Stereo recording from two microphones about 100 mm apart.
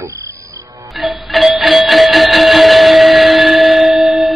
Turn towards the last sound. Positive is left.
turn(degrees=0)  # may be behind; listen again after turning